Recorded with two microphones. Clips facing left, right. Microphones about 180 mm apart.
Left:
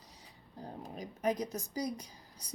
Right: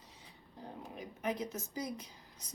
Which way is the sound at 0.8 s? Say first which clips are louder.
Left 4 dB; 35° left (ahead or behind).